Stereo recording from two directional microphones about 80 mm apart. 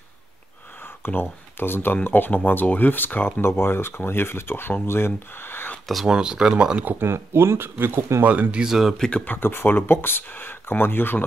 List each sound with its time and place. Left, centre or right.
0.8 s speech: left
6.0 s speech: centre
8.9 s speech: centre
9.2 s speech: left